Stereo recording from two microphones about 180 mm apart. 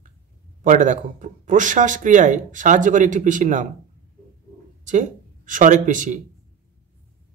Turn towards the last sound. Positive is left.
turn(degrees=-45)  # may be behind; listen again after turning